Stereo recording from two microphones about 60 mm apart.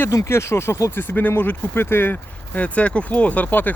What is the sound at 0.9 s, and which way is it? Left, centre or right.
Speech, left.